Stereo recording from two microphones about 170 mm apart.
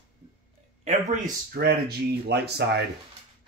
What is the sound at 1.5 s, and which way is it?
Speech, 70° right (ahead or behind).